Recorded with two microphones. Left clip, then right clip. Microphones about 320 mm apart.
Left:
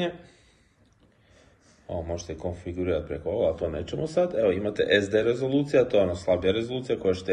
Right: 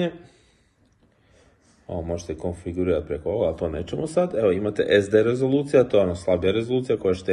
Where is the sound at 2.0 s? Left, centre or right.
Centre.